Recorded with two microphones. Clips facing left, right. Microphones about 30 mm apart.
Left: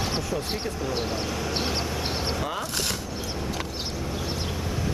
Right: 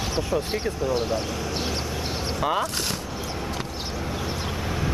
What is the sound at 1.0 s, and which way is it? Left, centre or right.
Speech, centre.